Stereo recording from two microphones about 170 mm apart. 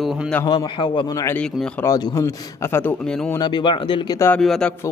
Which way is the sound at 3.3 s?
25° left (ahead or behind).